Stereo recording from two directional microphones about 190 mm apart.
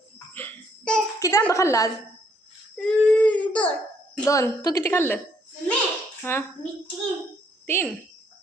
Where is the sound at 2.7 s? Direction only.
5° left (ahead or behind).